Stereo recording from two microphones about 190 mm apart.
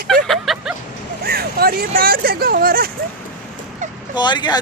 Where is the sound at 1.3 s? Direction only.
55° right (ahead or behind).